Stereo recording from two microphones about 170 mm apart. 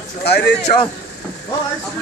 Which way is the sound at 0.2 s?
75° left (ahead or behind).